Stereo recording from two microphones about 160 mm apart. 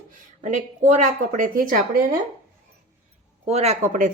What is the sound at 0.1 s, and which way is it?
A woman's voice, 50° right (ahead or behind).